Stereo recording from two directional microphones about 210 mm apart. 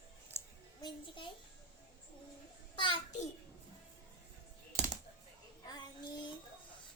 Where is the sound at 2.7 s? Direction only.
25° left (ahead or behind).